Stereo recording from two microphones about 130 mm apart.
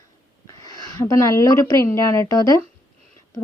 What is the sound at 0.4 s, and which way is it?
A woman's voice, 30° left (ahead or behind).